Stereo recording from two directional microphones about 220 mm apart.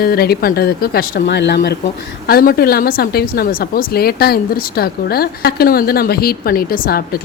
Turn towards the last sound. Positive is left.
turn(degrees=40)  # may be behind; listen again after turning